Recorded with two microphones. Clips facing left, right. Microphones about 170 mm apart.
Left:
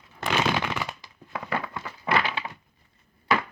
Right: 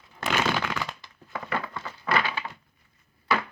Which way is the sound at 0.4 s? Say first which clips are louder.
Left 1 dB; 15° left (ahead or behind).